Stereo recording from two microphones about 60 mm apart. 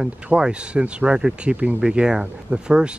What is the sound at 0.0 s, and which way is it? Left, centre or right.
Speech, centre.